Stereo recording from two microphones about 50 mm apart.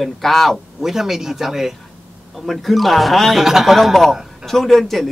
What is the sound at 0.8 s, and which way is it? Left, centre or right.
Speech, centre.